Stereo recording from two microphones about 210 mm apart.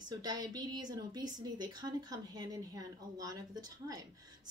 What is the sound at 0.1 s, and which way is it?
A woman's voice, 20° right (ahead or behind).